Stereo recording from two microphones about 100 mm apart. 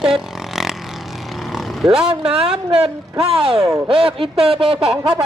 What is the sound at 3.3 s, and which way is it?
Speech, 75° right (ahead or behind).